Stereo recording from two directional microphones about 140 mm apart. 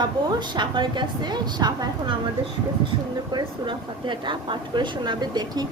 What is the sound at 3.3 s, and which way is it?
A woman's voice, 35° right (ahead or behind).